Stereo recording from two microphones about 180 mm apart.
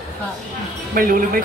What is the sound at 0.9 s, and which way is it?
Speech, 50° right (ahead or behind).